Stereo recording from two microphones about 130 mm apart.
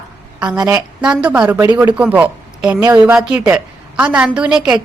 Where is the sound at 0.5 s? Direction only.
25° right (ahead or behind).